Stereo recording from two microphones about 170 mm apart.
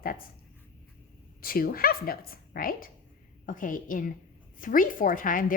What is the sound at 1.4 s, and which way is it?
A woman's voice, 60° left (ahead or behind).